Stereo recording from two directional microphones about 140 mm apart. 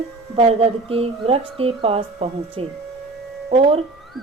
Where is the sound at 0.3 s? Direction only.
45° right (ahead or behind).